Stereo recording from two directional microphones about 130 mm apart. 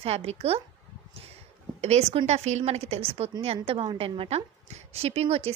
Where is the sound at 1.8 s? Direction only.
55° right (ahead or behind).